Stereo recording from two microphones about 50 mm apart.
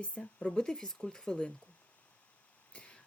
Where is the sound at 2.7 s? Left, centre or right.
Left.